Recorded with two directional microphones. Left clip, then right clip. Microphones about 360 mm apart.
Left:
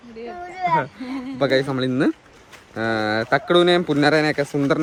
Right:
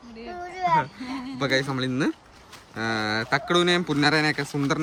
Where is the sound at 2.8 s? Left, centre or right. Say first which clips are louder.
Left 5 dB; centre.